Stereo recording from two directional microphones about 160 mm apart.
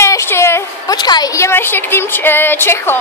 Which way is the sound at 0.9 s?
25° left (ahead or behind).